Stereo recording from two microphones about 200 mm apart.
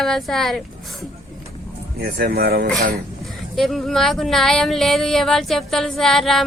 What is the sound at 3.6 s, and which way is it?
Speech, centre (ahead or behind).